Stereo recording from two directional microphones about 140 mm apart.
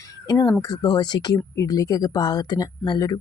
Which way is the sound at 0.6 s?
30° left (ahead or behind).